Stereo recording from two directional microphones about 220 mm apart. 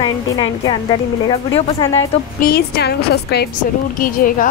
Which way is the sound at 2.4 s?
45° left (ahead or behind).